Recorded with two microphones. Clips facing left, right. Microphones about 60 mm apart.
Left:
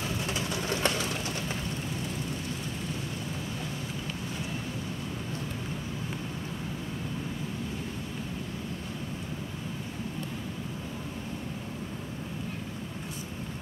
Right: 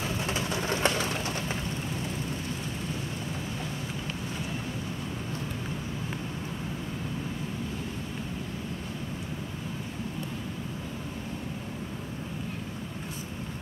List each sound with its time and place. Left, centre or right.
0.0 s pigeon: right